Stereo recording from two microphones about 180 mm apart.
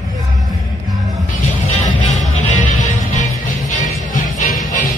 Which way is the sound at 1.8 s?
40° left (ahead or behind).